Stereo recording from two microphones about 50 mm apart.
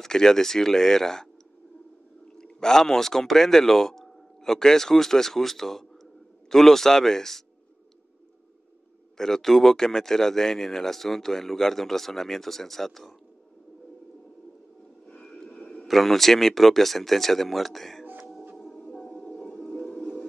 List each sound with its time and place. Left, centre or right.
0.0 s speech: centre
2.3 s speech: centre
9.1 s speech: centre
15.2 s a sound: centre
15.5 s a sound: left
15.9 s speech: centre
19.1 s music: centre